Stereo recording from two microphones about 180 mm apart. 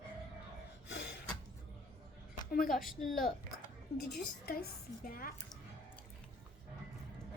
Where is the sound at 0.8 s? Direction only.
75° left (ahead or behind).